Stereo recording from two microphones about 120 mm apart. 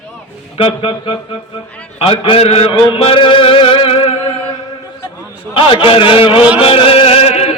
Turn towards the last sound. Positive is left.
turn(degrees=60)  # may be behind; listen again after turning